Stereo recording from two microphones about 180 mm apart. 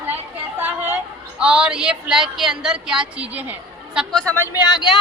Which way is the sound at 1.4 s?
5° right (ahead or behind).